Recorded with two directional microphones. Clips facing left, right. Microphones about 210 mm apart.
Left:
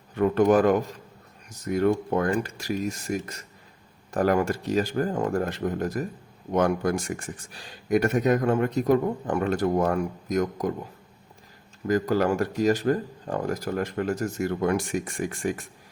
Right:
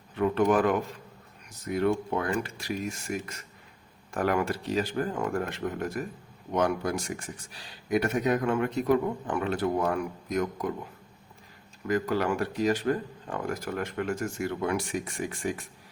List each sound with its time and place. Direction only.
0.2 s speech: 45° left (ahead or behind)
6.5 s speech: 50° left (ahead or behind)
11.9 s speech: 40° left (ahead or behind)